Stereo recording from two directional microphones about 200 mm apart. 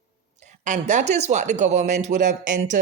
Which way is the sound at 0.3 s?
35° right (ahead or behind).